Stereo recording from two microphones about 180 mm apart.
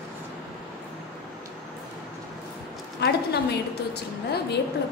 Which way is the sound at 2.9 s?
65° left (ahead or behind).